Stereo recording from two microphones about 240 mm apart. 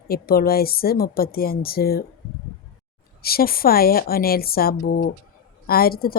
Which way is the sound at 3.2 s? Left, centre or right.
Left.